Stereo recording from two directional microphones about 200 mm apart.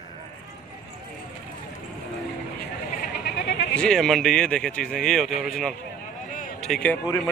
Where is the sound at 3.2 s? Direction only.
60° left (ahead or behind).